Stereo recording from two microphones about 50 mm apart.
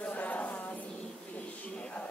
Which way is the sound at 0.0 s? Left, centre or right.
Left.